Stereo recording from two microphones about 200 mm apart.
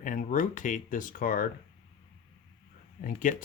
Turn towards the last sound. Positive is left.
turn(degrees=40)  # may be behind; listen again after turning